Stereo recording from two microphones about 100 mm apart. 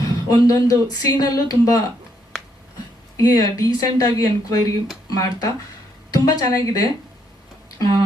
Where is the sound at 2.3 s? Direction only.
10° left (ahead or behind).